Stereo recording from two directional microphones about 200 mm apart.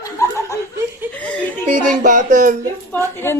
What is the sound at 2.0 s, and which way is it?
Speech, 40° right (ahead or behind).